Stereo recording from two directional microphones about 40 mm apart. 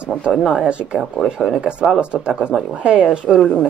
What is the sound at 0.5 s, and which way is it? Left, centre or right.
Speech, right.